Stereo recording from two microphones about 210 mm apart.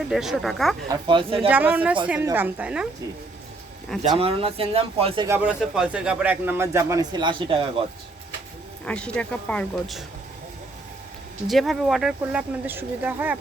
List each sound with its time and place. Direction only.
0.1 s speech: centre (ahead or behind)
0.9 s speech: 20° right (ahead or behind)
1.5 s speech: 10° right (ahead or behind)
4.1 s speech: 25° right (ahead or behind)
5.3 s speech: 5° right (ahead or behind); by 7.9 s 25° right (ahead or behind)
8.8 s speech: 5° left (ahead or behind)
11.4 s speech: centre (ahead or behind)